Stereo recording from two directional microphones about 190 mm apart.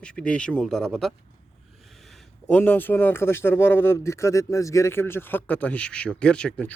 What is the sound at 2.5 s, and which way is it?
A man's voice, 10° left (ahead or behind).